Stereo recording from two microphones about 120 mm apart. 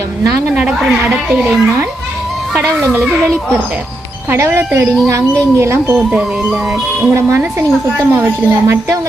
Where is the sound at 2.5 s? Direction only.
15° right (ahead or behind).